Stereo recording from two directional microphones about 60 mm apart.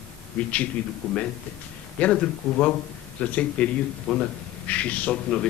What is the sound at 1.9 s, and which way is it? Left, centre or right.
A man's voice, centre.